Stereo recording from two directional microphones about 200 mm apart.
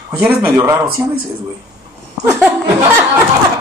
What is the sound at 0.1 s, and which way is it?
Speech, 10° right (ahead or behind).